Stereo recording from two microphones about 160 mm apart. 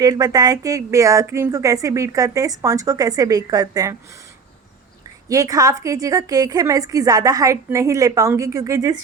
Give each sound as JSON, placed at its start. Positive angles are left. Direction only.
{"t": 0.0, "sound": "speech", "side_deg": -25}
{"t": 5.3, "sound": "speech", "side_deg": -20}